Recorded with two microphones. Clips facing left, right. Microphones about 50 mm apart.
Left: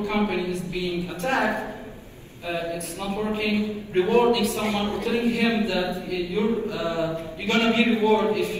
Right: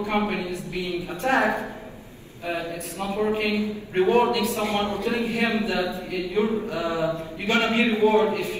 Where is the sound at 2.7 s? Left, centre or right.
Right.